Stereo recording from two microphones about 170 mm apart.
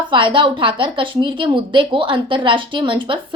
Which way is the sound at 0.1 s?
30° right (ahead or behind).